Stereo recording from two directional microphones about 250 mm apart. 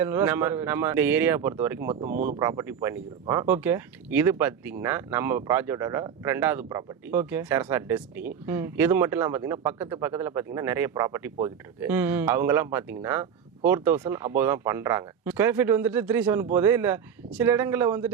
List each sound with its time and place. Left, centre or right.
0.0 s speech: centre
2.0 s speech: right
2.4 s speech: centre